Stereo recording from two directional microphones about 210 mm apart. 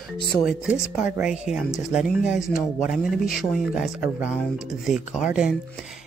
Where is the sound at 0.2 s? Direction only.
50° left (ahead or behind).